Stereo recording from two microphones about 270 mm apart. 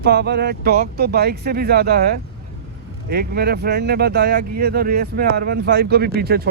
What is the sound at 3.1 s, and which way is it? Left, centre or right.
Speech, right.